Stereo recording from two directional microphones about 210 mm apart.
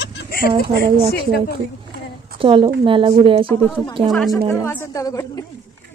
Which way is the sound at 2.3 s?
25° right (ahead or behind).